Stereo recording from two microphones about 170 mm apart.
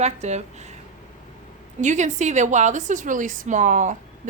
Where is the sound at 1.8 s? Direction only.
45° right (ahead or behind).